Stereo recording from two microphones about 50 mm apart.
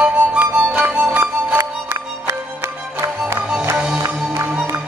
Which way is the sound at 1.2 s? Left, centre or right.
Right.